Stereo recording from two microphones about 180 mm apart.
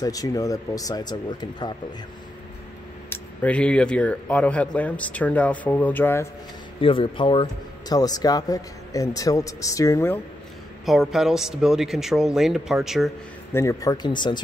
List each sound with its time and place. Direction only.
0.0 s a man's voice: 20° left (ahead or behind)
3.1 s speech: 5° left (ahead or behind)
6.8 s a man's voice: 30° left (ahead or behind); by 10.2 s 15° left (ahead or behind)
10.9 s speech: centre (ahead or behind)
13.5 s a man's voice: 15° left (ahead or behind)